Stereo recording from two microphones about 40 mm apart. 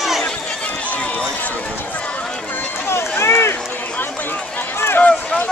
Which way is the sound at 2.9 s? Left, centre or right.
Left.